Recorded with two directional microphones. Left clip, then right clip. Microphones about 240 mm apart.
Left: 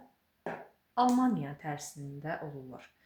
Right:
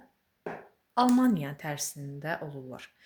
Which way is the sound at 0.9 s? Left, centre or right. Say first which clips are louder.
Right 3 dB; right.